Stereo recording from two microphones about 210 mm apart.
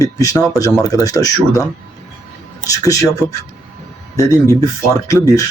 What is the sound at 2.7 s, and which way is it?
Speech, 15° left (ahead or behind).